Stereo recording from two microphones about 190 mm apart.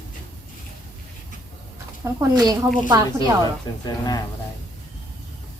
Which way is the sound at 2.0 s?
15° right (ahead or behind).